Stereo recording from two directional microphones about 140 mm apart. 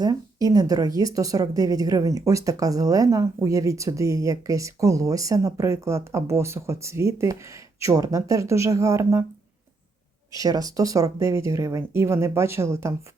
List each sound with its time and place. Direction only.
0.0 s a woman's voice: 25° right (ahead or behind)
10.3 s a woman's voice: 25° right (ahead or behind)